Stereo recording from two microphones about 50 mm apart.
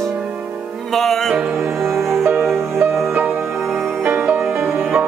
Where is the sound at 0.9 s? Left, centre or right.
Centre.